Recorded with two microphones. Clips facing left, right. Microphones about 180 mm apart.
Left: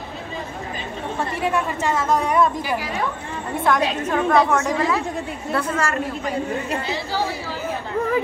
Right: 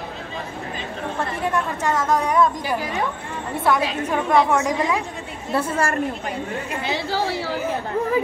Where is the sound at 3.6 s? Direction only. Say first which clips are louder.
Left 1 dB; 10° right (ahead or behind).